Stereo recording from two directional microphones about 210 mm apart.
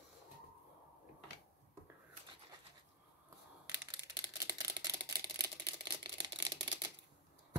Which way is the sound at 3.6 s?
15° right (ahead or behind).